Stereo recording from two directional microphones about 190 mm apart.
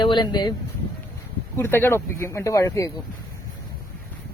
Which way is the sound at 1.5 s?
10° left (ahead or behind).